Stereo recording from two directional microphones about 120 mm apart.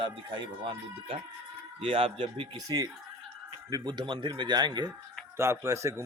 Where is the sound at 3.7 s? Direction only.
40° right (ahead or behind).